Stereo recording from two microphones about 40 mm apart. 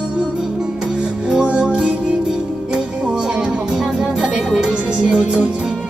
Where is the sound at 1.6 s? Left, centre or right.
Centre.